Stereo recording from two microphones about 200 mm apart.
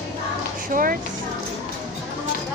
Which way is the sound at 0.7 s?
45° right (ahead or behind).